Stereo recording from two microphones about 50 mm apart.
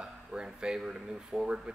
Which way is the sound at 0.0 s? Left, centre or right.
Centre.